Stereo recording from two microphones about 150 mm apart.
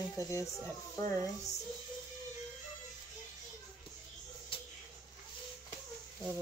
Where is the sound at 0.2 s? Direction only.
20° left (ahead or behind).